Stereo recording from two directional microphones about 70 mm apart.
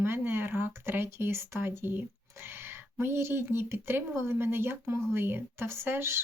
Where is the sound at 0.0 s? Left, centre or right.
Right.